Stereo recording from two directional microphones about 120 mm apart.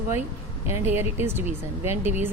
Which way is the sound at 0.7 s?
20° right (ahead or behind).